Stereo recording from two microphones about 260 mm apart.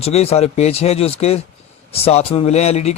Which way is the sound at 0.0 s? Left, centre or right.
Left.